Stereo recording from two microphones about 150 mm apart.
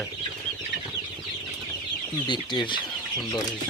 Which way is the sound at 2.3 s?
30° left (ahead or behind).